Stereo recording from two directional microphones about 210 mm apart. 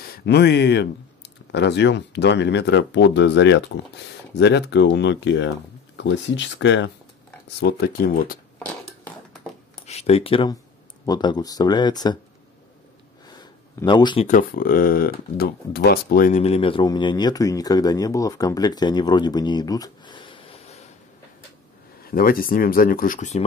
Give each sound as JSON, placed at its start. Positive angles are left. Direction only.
{"t": 0.0, "sound": "speech", "side_deg": 50}
{"t": 7.6, "sound": "speech", "side_deg": 45}
{"t": 8.6, "sound": "a sound", "side_deg": 5}
{"t": 9.8, "sound": "speech", "side_deg": 30}
{"t": 13.4, "sound": "a sound", "side_deg": 20}
{"t": 14.2, "sound": "speech", "side_deg": 40}
{"t": 22.0, "sound": "speech", "side_deg": 45}